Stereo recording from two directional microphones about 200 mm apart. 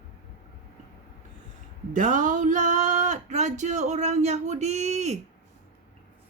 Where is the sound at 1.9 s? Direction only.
40° right (ahead or behind).